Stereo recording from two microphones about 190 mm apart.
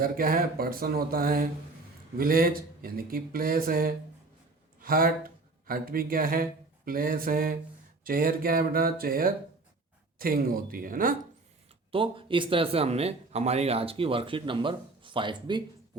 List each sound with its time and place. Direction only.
0.0 s speech: 50° right (ahead or behind)
11.9 s speech: 30° right (ahead or behind)